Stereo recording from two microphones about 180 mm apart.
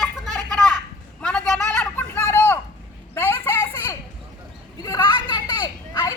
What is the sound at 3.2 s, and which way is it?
Children playing, 15° left (ahead or behind).